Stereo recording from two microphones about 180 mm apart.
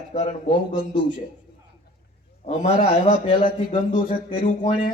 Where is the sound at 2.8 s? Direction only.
45° left (ahead or behind).